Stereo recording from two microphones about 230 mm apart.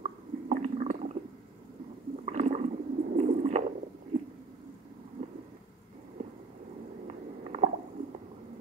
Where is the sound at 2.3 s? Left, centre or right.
Right.